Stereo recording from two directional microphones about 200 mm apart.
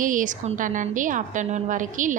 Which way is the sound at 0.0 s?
40° right (ahead or behind).